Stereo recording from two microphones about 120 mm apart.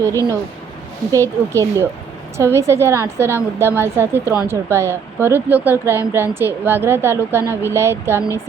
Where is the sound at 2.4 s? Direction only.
25° right (ahead or behind).